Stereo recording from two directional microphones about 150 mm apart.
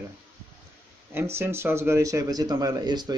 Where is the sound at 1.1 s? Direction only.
15° right (ahead or behind).